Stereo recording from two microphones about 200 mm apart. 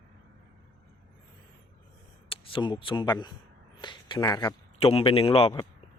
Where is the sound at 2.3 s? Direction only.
25° left (ahead or behind).